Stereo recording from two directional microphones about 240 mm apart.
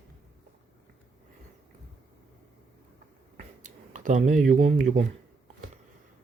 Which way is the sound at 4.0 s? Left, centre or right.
Right.